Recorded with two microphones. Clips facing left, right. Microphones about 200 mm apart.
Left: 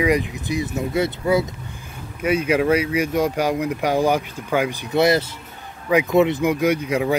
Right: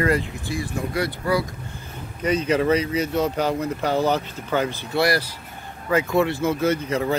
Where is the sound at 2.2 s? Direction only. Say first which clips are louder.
Left 2 dB; 10° left (ahead or behind).